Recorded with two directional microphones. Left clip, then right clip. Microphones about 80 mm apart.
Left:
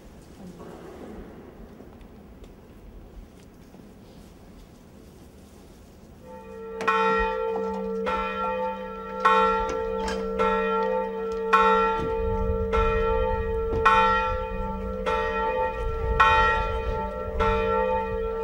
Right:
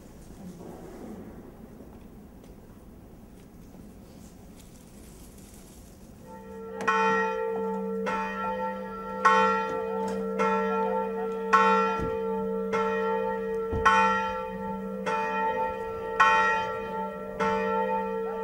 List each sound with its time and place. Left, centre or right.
6.9 s church bell: centre
8.5 s church bell: centre
9.2 s church bell: centre
9.9 s church bell: left; by 11.2 s centre
11.5 s church bell: centre
13.1 s church bell: centre
13.8 s church bell: centre
15.0 s church bell: centre